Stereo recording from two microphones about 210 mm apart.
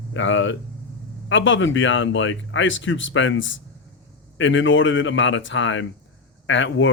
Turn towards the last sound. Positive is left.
turn(degrees=60)  # may be behind; listen again after turning